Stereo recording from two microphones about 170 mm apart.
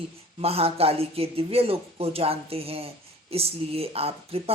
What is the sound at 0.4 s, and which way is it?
Speech, 35° right (ahead or behind).